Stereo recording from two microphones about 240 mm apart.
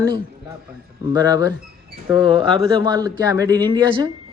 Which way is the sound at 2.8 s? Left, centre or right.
Centre.